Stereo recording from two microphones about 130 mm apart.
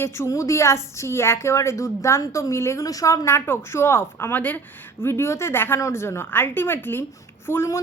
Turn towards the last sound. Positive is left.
turn(degrees=20)  # may be behind; listen again after turning